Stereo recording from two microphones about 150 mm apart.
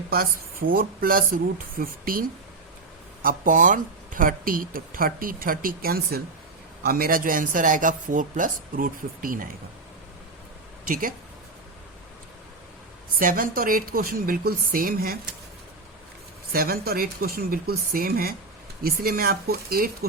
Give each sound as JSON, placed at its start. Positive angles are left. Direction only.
{"t": 0.1, "sound": "speech", "side_deg": -80}
{"t": 3.2, "sound": "speech", "side_deg": -60}
{"t": 10.8, "sound": "speech", "side_deg": -70}
{"t": 13.1, "sound": "speech", "side_deg": -70}
{"t": 16.5, "sound": "speech", "side_deg": -80}